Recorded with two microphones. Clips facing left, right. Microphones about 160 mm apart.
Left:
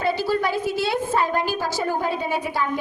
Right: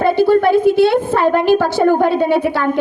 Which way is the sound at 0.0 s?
55° right (ahead or behind).